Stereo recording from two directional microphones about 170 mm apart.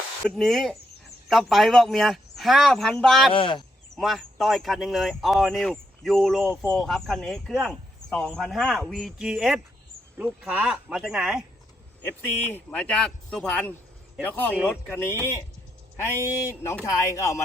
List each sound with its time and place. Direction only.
0.3 s speech: centre (ahead or behind)
3.3 s speech: 30° left (ahead or behind)
3.9 s speech: centre (ahead or behind)
12.0 s speech: 10° left (ahead or behind)